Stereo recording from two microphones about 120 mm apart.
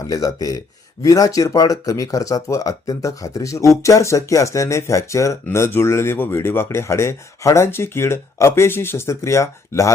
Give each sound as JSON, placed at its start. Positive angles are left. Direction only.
{"t": 0.1, "sound": "speech", "side_deg": 30}